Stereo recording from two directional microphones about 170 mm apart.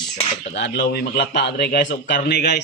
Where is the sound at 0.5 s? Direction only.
85° left; by 2.6 s 70° left (ahead or behind).